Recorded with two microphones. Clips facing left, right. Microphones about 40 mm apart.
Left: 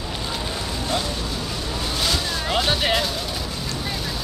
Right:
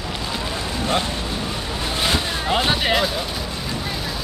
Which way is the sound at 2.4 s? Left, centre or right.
Centre.